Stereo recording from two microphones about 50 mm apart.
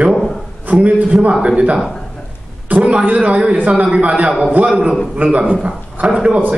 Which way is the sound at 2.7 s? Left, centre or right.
Right.